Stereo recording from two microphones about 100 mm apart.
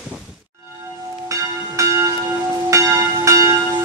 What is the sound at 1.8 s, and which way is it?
Church bell, 35° right (ahead or behind).